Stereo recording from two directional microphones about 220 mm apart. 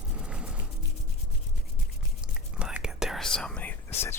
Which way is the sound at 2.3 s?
5° right (ahead or behind).